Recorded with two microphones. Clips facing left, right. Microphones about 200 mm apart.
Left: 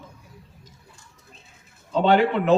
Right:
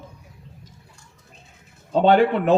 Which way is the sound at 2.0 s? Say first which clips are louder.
Right 2 dB; 45° right (ahead or behind).